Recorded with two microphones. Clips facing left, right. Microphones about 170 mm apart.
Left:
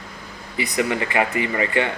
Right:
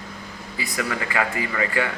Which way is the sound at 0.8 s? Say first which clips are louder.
Left 4 dB; 25° left (ahead or behind).